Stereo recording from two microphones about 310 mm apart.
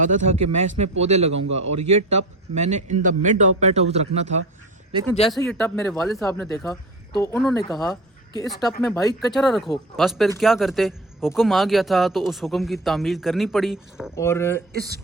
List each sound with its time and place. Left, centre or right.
0.0 s a man's voice: right
1.3 s a man's voice: right
1.8 s a man's voice: right
5.3 s a man's voice: centre
9.3 s a man's voice: centre
14.7 s speech: right